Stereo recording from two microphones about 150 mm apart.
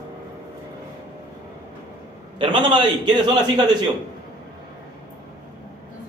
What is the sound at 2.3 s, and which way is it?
A man's voice, 30° right (ahead or behind).